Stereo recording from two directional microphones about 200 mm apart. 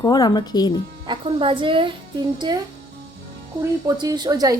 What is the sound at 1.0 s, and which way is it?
A woman's voice, 25° right (ahead or behind).